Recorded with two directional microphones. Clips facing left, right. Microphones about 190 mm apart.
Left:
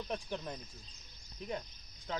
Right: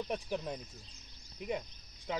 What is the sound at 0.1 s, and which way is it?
Speech, 10° right (ahead or behind).